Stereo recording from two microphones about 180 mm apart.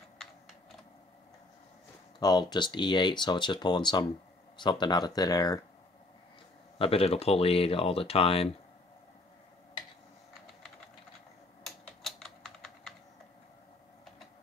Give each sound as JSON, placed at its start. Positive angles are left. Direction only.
{"t": 2.1, "sound": "speech", "side_deg": 20}
{"t": 6.8, "sound": "speech", "side_deg": 30}
{"t": 11.6, "sound": "computer keyboard", "side_deg": 0}